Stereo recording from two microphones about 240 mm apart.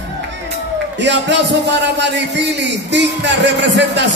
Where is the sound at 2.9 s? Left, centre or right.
Right.